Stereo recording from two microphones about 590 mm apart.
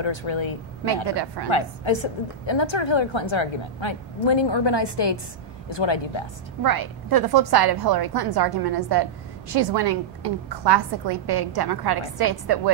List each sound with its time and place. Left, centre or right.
0.0 s a woman's voice: left
1.0 s a woman's voice: right
1.5 s a woman's voice: left
6.6 s a woman's voice: right